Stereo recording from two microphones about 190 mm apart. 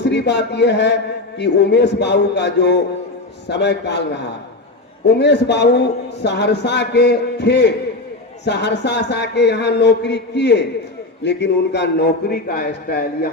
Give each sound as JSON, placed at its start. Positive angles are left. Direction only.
{"t": 0.0, "sound": "speech", "side_deg": 65}